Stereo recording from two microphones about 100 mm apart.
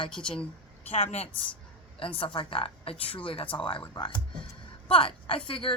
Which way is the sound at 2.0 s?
60° left (ahead or behind).